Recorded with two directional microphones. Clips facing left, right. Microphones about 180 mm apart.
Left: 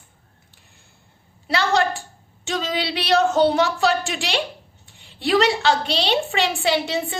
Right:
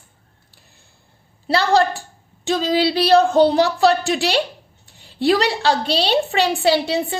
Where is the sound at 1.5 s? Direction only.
35° right (ahead or behind).